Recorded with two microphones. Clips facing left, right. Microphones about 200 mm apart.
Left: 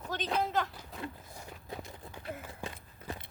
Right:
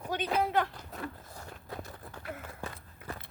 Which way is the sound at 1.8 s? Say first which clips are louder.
Right 1 dB; 20° left (ahead or behind).